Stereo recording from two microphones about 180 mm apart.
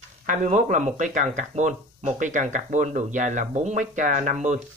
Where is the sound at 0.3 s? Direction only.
45° right (ahead or behind).